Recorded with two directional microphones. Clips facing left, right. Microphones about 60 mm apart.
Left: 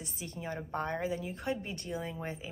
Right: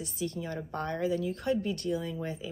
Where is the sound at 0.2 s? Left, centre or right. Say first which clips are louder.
Right 5 dB; left.